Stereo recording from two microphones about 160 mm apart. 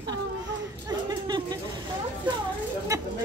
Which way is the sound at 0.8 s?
25° right (ahead or behind).